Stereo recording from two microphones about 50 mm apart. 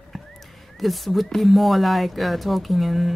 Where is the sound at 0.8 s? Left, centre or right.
Centre.